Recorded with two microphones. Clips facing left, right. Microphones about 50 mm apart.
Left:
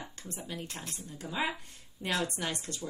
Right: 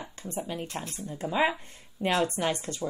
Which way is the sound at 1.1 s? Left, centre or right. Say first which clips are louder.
Right 8 dB; right.